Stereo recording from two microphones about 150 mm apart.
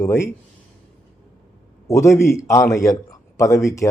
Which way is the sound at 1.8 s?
20° left (ahead or behind).